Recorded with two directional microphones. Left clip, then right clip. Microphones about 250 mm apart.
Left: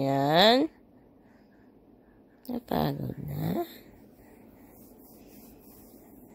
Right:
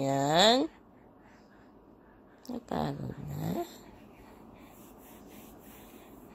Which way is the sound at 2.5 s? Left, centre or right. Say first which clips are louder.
Left 5 dB; centre.